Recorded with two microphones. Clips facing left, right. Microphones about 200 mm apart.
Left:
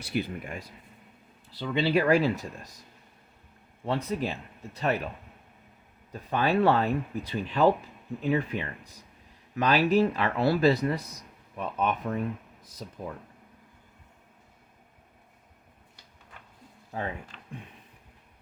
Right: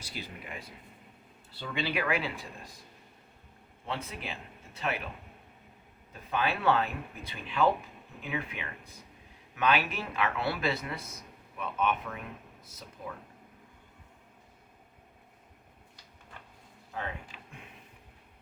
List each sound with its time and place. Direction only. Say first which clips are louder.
0.0 s speech: left 11 dB; 60° left (ahead or behind)
1.7 s speech: left 8 dB; 30° left (ahead or behind)
3.8 s speech: left 9 dB; 40° left (ahead or behind)
6.3 s speech: left 5 dB; 40° left (ahead or behind)
17.3 s a sound: even; 5° right (ahead or behind)